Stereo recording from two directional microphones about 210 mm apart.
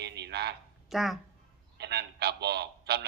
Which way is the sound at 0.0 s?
55° right (ahead or behind).